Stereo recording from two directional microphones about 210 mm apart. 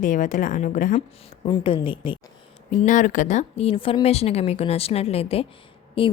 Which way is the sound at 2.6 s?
35° left (ahead or behind).